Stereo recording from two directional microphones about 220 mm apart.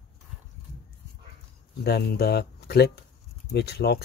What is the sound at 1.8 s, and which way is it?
Speech, 45° left (ahead or behind).